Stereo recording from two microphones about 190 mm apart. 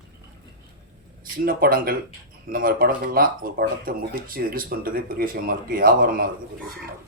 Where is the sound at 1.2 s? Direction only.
50° right (ahead or behind).